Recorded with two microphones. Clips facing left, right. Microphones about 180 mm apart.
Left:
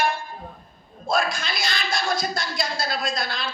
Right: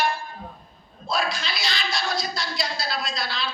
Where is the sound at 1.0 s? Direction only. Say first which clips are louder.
Left 3 dB; 50° left (ahead or behind).